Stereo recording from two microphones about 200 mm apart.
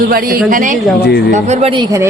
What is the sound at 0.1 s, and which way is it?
Speech, 50° right (ahead or behind).